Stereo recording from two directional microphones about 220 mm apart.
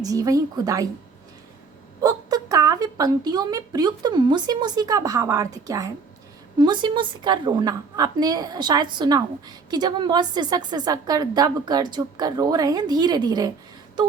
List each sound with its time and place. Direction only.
0.0 s speech: 15° right (ahead or behind)
2.0 s a woman's voice: 15° right (ahead or behind)